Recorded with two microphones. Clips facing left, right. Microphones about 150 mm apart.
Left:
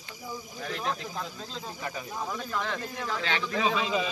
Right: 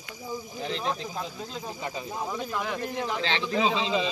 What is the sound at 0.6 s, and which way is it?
Speech, 25° right (ahead or behind).